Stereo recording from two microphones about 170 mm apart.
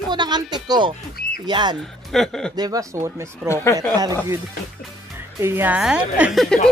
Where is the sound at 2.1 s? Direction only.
Centre (ahead or behind).